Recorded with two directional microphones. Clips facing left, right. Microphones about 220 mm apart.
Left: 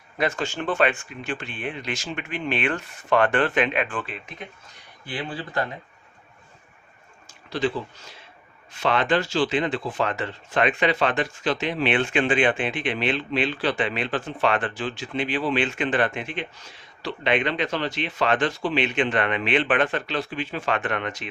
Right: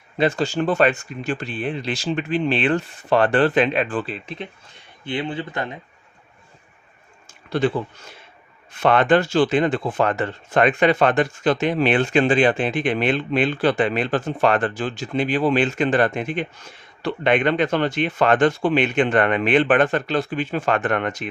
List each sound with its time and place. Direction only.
0.2 s speech: 35° right (ahead or behind)
5.0 s speech: 25° right (ahead or behind)
7.3 s speech: 55° right (ahead or behind)